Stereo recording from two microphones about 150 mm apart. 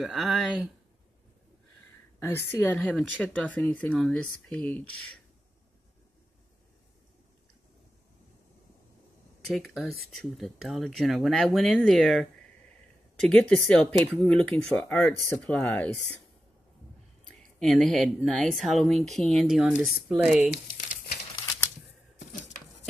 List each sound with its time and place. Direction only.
0.0 s speech: centre (ahead or behind)
2.1 s speech: 15° left (ahead or behind)
9.5 s speech: centre (ahead or behind)
17.4 s speech: 5° left (ahead or behind)
22.3 s a sound: 55° left (ahead or behind)